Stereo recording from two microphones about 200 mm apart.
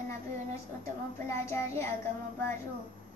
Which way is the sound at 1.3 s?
15° left (ahead or behind).